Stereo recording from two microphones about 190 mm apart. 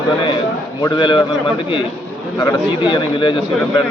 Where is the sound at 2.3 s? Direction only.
25° left (ahead or behind).